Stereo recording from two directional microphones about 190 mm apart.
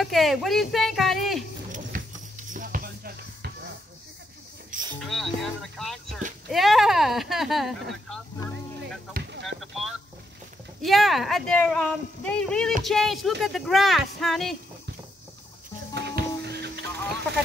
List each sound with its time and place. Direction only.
0.0 s speech: centre (ahead or behind)
1.7 s music: 45° right (ahead or behind)
5.0 s speech: centre (ahead or behind)
9.1 s a sound: 65° right (ahead or behind)
9.6 s boat: centre (ahead or behind)
10.8 s speech: centre (ahead or behind)
15.9 s music: 60° right (ahead or behind)